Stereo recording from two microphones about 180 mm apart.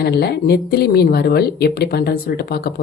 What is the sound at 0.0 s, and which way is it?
Speech, 60° left (ahead or behind).